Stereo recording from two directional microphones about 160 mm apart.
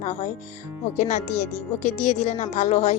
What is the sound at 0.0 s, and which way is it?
Speech, 50° left (ahead or behind).